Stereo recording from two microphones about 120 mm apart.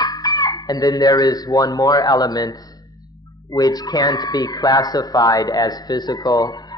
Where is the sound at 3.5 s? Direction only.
30° left (ahead or behind).